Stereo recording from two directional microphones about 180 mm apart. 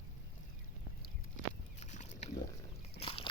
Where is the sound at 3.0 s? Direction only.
30° left (ahead or behind).